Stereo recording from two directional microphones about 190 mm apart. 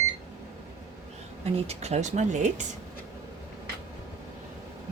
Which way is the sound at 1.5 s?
35° right (ahead or behind).